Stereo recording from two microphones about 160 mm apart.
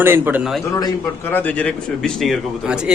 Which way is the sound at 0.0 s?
15° right (ahead or behind).